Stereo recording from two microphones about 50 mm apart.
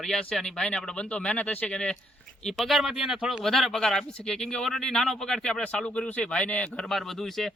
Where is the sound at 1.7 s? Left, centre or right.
Centre.